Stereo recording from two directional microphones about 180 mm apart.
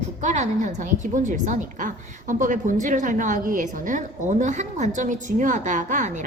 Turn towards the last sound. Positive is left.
turn(degrees=-45)  # may be behind; listen again after turning